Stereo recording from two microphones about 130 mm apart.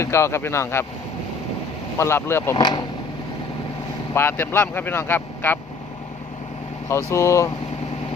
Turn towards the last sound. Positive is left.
turn(degrees=25)  # may be behind; listen again after turning